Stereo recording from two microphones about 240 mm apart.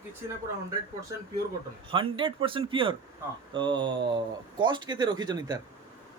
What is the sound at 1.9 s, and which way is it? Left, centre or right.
Speech, right.